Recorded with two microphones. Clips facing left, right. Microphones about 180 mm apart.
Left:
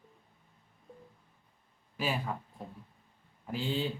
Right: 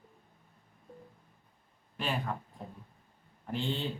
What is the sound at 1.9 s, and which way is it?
Speech, 5° left (ahead or behind).